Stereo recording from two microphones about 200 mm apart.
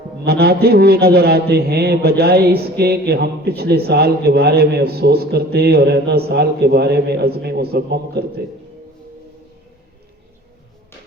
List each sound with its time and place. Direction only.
0.3 s a man's voice: 50° right (ahead or behind)